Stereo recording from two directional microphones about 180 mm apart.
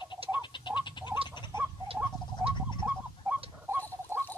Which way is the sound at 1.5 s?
25° left (ahead or behind).